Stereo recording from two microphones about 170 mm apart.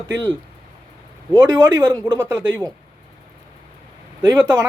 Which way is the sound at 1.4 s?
20° right (ahead or behind).